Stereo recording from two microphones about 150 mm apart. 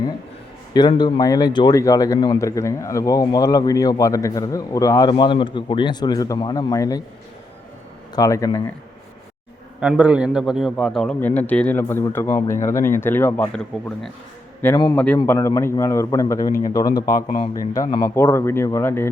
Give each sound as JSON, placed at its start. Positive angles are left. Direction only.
{"t": 0.7, "sound": "speech", "side_deg": 30}
{"t": 8.1, "sound": "speech", "side_deg": 20}
{"t": 9.8, "sound": "a man's voice", "side_deg": -10}
{"t": 13.5, "sound": "a man's voice", "side_deg": 5}
{"t": 17.2, "sound": "speech", "side_deg": 40}
{"t": 17.5, "sound": "a man's voice", "side_deg": 25}